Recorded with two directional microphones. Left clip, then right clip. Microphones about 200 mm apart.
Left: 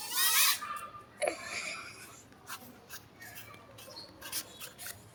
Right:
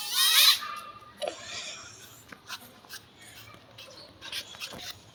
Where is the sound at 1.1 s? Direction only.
40° left (ahead or behind).